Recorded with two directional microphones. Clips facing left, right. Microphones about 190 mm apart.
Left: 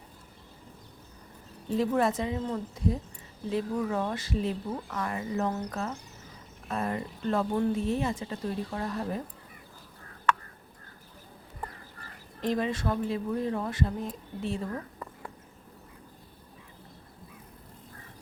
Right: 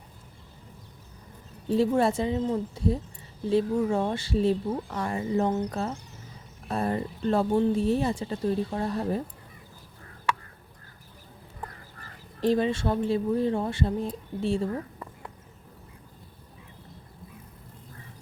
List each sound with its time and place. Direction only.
1.7 s speech: 30° right (ahead or behind)
12.4 s speech: 30° right (ahead or behind)